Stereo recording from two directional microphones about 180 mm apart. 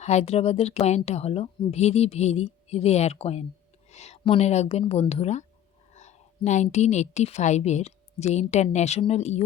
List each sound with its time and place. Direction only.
0.0 s a woman's voice: 35° left (ahead or behind)